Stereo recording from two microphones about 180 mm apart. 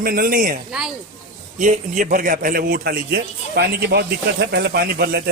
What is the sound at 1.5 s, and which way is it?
Speech, 45° right (ahead or behind).